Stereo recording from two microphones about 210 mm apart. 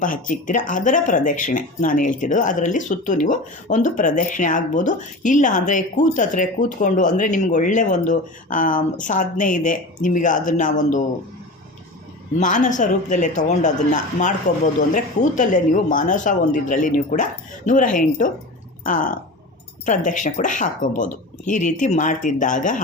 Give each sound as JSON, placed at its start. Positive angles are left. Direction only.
{"t": 0.0, "sound": "speech", "side_deg": 40}
{"t": 12.4, "sound": "speech", "side_deg": 35}